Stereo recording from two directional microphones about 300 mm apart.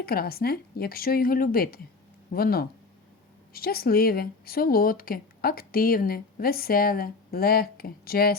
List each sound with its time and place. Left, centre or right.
0.0 s speech: left